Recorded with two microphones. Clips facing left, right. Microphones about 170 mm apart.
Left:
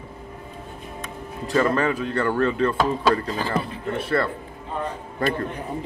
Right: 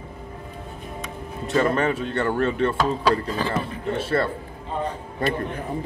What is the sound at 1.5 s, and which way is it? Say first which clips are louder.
Speech: even; 25° right (ahead or behind).